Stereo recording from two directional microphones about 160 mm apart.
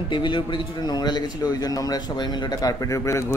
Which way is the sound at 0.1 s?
30° left (ahead or behind).